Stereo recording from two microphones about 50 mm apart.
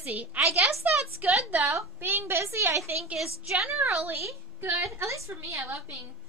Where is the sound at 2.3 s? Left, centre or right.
Right.